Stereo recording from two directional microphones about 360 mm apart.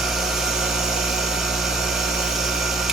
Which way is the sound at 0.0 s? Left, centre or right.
Centre.